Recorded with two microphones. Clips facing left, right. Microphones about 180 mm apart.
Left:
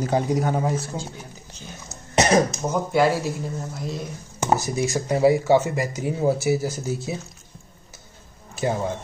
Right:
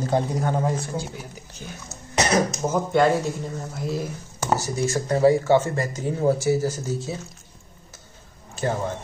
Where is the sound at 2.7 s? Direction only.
5° left (ahead or behind).